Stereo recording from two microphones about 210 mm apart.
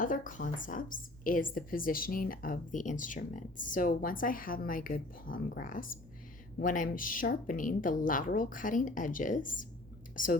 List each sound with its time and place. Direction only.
0.0 s a woman's voice: 40° left (ahead or behind)